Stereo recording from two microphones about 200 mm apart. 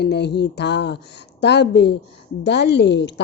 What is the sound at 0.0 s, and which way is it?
A woman's voice, 55° left (ahead or behind).